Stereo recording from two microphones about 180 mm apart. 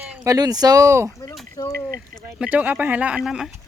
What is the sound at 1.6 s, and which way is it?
Speech, 20° left (ahead or behind).